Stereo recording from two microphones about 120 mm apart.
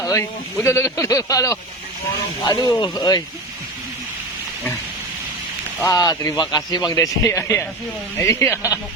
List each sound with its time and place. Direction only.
0.0 s a man's voice: 25° left (ahead or behind)
5.8 s a man's voice: 30° left (ahead or behind)